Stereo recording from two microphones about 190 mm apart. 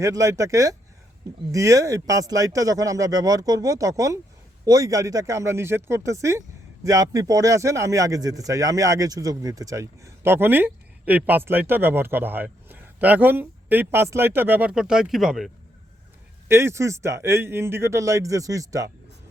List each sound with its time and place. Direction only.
0.0 s speech: 15° right (ahead or behind)
16.5 s speech: 15° right (ahead or behind)